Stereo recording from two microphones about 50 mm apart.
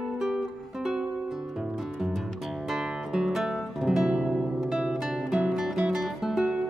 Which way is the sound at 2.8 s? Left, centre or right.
Centre.